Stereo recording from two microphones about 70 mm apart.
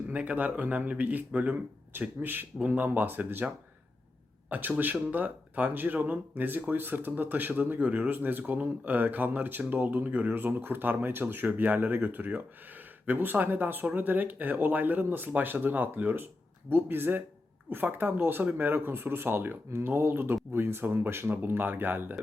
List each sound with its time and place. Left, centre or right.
0.1 s speech: right
4.4 s speech: right